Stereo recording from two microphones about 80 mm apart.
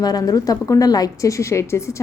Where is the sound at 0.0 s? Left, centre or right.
Left.